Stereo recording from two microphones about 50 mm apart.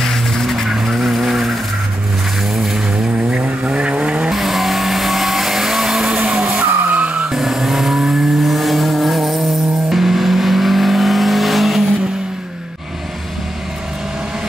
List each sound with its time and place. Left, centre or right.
0.0 s vehicle: centre
2.5 s vehicle: centre
3.3 s vehicle: right
4.3 s vehicle: centre; by 7.2 s right
7.2 s vehicle: centre